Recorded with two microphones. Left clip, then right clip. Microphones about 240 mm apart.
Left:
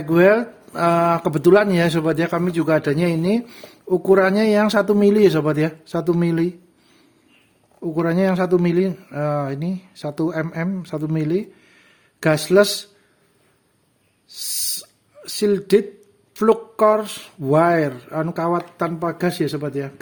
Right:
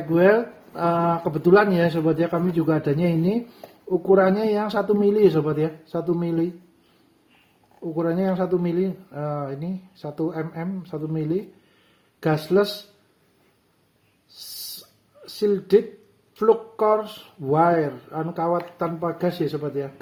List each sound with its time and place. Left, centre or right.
0.1 s speech: left
7.9 s speech: left
14.3 s a sound: left
16.3 s speech: left